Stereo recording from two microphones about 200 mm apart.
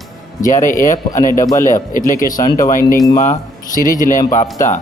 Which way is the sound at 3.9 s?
40° left (ahead or behind).